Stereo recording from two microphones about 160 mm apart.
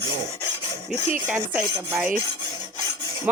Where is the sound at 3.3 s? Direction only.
10° right (ahead or behind).